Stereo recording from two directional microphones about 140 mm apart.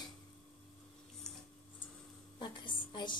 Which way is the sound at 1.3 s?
5° left (ahead or behind).